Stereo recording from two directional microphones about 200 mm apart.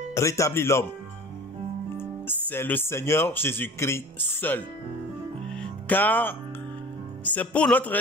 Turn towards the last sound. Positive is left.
turn(degrees=5)  # may be behind; listen again after turning